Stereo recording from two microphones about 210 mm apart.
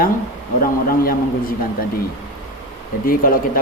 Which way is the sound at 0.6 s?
45° left (ahead or behind).